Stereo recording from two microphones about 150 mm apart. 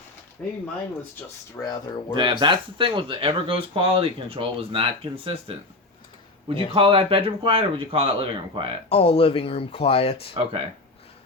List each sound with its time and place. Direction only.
0.4 s speech: 10° left (ahead or behind)
1.5 s speech: 25° left (ahead or behind)
2.4 s speech: 35° right (ahead or behind)
6.7 s speech: 35° right (ahead or behind)
8.9 s speech: 40° left (ahead or behind)
10.4 s speech: 35° right (ahead or behind)